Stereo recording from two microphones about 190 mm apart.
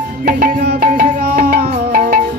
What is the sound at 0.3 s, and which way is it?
Music, 50° right (ahead or behind).